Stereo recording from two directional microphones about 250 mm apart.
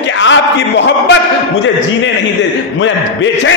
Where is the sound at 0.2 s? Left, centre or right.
Left.